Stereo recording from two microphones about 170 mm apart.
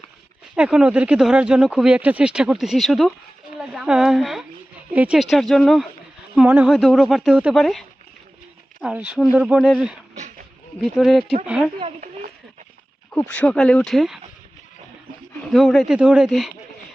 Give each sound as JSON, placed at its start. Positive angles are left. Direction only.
{"t": 0.5, "sound": "speech", "side_deg": -5}
{"t": 11.8, "sound": "speech", "side_deg": -35}
{"t": 13.1, "sound": "speech", "side_deg": 5}
{"t": 15.4, "sound": "speech", "side_deg": 0}